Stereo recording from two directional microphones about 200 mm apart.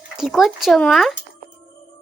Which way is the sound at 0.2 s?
Centre (ahead or behind).